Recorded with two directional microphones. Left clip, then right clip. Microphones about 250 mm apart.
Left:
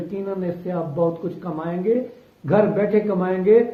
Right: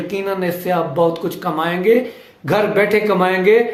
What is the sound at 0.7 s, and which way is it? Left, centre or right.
Speech, centre.